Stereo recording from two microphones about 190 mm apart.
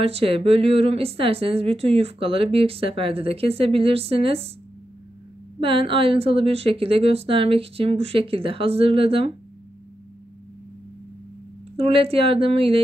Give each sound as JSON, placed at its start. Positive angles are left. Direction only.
{"t": 0.0, "sound": "a woman's voice", "side_deg": -30}
{"t": 5.6, "sound": "a woman's voice", "side_deg": -30}
{"t": 11.7, "sound": "a woman's voice", "side_deg": -30}